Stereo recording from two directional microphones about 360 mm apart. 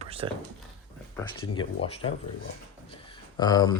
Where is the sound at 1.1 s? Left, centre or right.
Centre.